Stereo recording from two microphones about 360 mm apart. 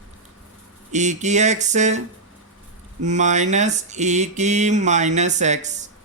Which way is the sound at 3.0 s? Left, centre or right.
Centre.